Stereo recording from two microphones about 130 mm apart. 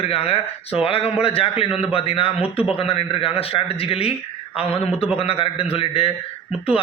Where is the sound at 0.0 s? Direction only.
50° left (ahead or behind).